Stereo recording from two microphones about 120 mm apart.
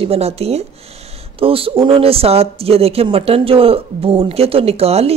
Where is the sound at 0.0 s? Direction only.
55° right (ahead or behind).